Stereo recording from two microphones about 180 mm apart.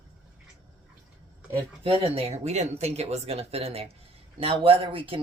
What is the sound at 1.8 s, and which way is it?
Speech, 30° right (ahead or behind).